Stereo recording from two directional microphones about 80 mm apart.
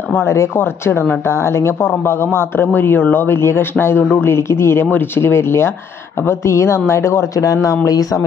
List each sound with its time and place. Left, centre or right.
0.1 s speech: left